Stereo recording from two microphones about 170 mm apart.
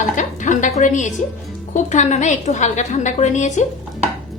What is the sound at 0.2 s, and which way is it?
Music, 45° left (ahead or behind).